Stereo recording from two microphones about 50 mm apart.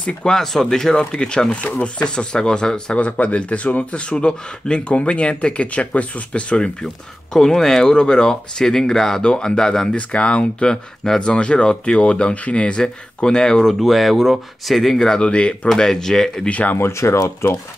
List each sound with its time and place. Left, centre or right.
0.0 s speech: centre
7.3 s speech: centre
15.1 s speech: left
15.7 s speech: centre
16.4 s speech: left
16.7 s speech: left